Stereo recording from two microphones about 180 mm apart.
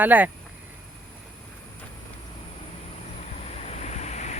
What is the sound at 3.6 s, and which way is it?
Waves, 40° left (ahead or behind).